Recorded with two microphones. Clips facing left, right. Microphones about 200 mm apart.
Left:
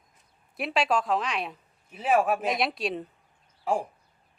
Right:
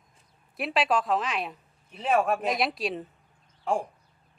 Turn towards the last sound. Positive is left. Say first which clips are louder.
# even
turn(degrees=5)  # may be behind; listen again after turning